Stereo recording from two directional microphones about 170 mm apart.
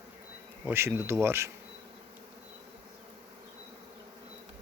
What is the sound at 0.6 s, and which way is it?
Speech, 15° right (ahead or behind).